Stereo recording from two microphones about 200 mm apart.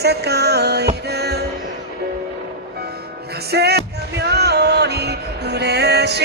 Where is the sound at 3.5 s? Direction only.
55° right (ahead or behind).